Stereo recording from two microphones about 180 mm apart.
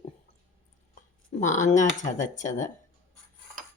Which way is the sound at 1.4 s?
40° left (ahead or behind).